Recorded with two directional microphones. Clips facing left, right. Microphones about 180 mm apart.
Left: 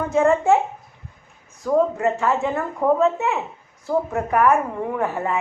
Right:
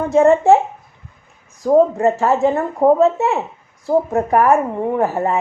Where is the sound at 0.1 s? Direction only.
35° right (ahead or behind).